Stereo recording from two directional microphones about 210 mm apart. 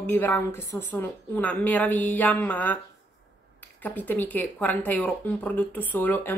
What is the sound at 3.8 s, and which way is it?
Speech, 10° left (ahead or behind).